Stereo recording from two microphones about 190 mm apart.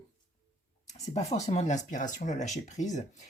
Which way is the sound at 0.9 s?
35° left (ahead or behind).